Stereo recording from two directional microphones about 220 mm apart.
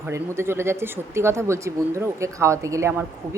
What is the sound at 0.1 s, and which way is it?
Speech, 10° right (ahead or behind).